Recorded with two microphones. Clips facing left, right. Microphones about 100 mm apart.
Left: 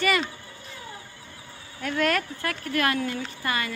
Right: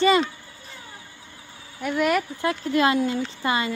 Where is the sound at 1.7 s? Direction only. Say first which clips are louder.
Right 3 dB; 15° right (ahead or behind).